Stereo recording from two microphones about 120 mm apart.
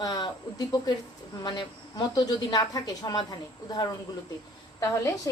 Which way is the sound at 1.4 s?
35° left (ahead or behind).